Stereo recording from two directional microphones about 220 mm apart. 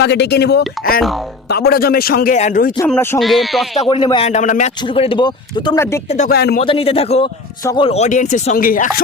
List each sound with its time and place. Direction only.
0.0 s a man's voice: 50° left (ahead or behind)
2.7 s speech: 10° left (ahead or behind)
3.2 s speech: centre (ahead or behind)
3.8 s speech: 20° left (ahead or behind)
6.1 s speech: 30° left (ahead or behind)
6.3 s a man's voice: 45° left (ahead or behind)
6.6 s speech: 25° left (ahead or behind)
7.6 s speech: 15° left (ahead or behind)
7.9 s speech: 30° left (ahead or behind)